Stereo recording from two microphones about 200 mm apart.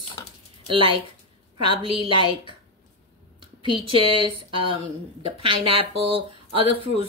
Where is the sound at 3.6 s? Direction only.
25° right (ahead or behind).